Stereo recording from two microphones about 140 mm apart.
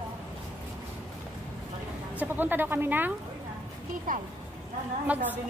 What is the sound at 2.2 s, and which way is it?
Speech, 15° right (ahead or behind).